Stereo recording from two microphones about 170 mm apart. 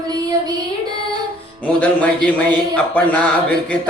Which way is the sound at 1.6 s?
10° left (ahead or behind).